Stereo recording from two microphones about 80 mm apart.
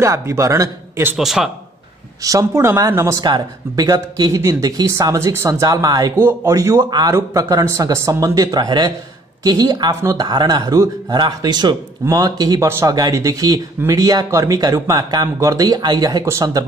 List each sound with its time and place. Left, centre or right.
0.0 s speech: right
1.1 s a man's voice: centre
2.2 s speech: right
3.2 s speech: right
6.8 s a man's voice: right
7.2 s a man's voice: right
11.1 s a man's voice: right
12.1 s a man's voice: right
13.1 s speech: right
15.3 s speech: right
15.8 s a man's voice: right